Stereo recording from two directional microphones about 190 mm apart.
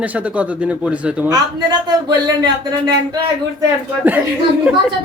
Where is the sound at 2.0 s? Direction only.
20° right (ahead or behind).